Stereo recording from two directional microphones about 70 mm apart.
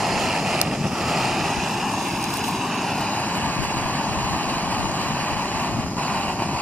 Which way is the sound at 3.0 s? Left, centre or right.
Left.